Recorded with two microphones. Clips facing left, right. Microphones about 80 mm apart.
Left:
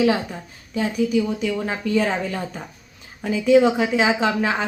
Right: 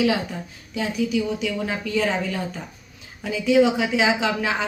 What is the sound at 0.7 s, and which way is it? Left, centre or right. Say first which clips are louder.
A woman's voice: left 3 dB; left.